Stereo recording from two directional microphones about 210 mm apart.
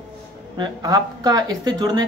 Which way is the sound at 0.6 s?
20° right (ahead or behind).